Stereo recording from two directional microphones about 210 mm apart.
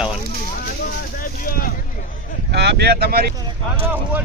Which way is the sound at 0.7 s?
40° left (ahead or behind).